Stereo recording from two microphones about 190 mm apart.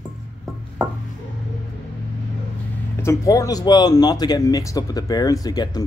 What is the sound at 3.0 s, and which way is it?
Speech, 15° left (ahead or behind).